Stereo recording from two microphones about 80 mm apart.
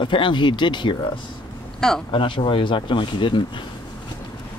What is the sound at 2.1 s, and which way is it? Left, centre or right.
Speech, left.